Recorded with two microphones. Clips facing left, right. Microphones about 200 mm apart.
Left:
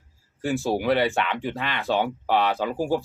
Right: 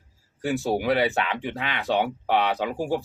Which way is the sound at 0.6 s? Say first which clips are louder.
Left 1 dB; centre (ahead or behind).